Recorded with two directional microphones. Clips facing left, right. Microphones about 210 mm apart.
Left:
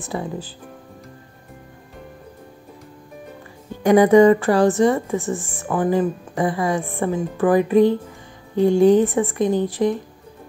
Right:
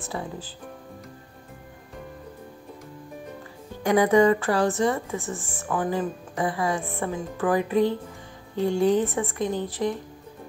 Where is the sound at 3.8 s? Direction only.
15° left (ahead or behind).